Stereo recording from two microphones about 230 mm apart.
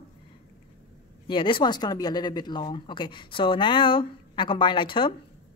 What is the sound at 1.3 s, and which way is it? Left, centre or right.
Speech, left.